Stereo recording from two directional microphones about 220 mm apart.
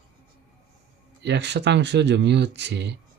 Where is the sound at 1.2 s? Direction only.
50° right (ahead or behind).